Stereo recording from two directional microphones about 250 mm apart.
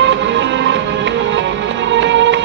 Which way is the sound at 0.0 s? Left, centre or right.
Right.